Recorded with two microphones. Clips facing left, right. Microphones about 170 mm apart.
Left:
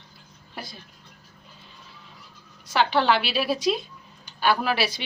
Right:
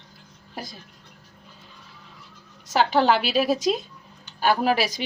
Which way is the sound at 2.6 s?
45° right (ahead or behind).